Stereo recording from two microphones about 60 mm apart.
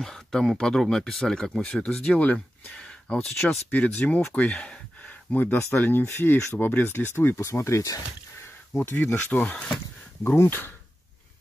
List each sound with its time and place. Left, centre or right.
0.0 s speech: centre
1.7 s speech: left
3.7 s speech: left
5.3 s speech: left
7.3 s speech: left
8.9 s speech: left
10.4 s speech: left